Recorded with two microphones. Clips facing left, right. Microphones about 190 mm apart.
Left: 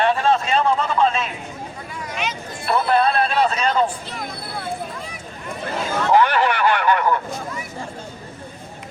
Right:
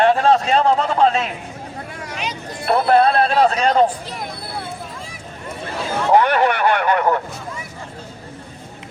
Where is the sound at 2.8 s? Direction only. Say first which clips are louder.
Right 4 dB; 40° right (ahead or behind).